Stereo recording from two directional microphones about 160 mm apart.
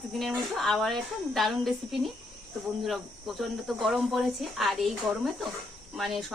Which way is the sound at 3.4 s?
Centre (ahead or behind).